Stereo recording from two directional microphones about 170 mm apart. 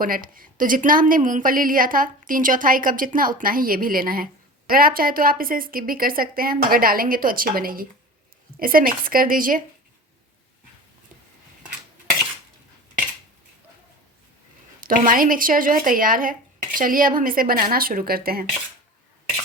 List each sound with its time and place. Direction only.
0.0 s speech: 55° right (ahead or behind)
14.8 s speech: 55° right (ahead or behind)